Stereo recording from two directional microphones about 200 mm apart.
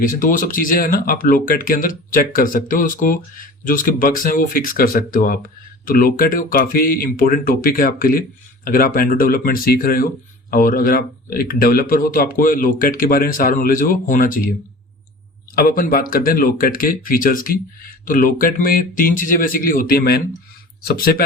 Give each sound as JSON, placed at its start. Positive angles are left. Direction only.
{"t": 0.0, "sound": "speech", "side_deg": 40}
{"t": 15.5, "sound": "speech", "side_deg": 45}